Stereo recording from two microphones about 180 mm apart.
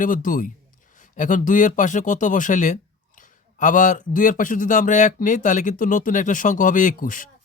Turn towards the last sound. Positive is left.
turn(degrees=50)  # may be behind; listen again after turning